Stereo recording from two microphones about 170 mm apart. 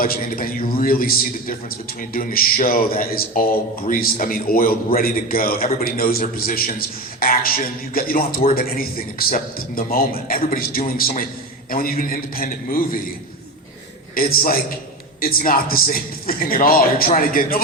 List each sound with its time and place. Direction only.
0.0 s a man's voice: 55° left (ahead or behind)
14.2 s a man's voice: 60° left (ahead or behind)